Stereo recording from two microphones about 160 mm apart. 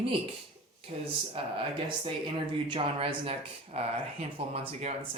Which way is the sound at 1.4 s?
35° right (ahead or behind).